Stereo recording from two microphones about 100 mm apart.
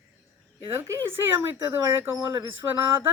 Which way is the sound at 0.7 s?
25° right (ahead or behind).